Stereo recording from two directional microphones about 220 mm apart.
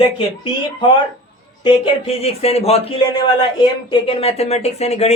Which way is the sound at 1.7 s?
25° left (ahead or behind).